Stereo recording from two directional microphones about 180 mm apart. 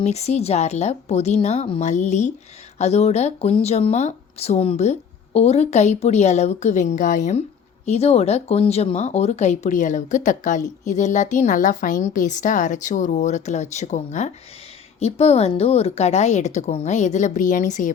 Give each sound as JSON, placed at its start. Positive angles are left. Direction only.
{"t": 0.0, "sound": "speech", "side_deg": 35}